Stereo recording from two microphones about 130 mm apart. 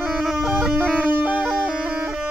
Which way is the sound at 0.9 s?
15° right (ahead or behind).